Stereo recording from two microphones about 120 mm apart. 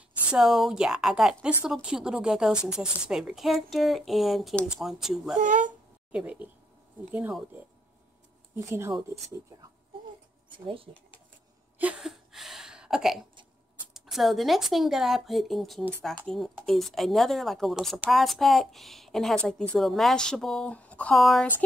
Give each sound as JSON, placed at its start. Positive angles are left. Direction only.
{"t": 0.3, "sound": "a woman's voice", "side_deg": 0}
{"t": 5.4, "sound": "speech", "side_deg": -90}
{"t": 6.1, "sound": "speech", "side_deg": -10}
{"t": 8.5, "sound": "speech", "side_deg": -20}
{"t": 10.5, "sound": "speech", "side_deg": -45}
{"t": 11.8, "sound": "a sound", "side_deg": -5}
{"t": 13.9, "sound": "a woman's voice", "side_deg": 0}